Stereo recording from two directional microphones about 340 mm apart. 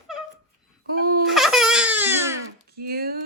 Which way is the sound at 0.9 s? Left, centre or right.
Right.